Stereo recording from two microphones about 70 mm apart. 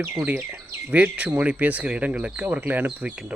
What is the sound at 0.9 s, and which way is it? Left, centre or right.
Speech, right.